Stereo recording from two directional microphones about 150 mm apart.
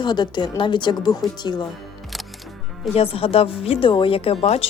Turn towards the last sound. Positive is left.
turn(degrees=40)  # may be behind; listen again after turning